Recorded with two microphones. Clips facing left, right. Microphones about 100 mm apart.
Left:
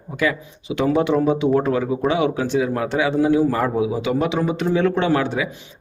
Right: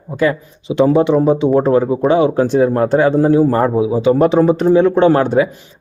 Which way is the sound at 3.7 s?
30° right (ahead or behind).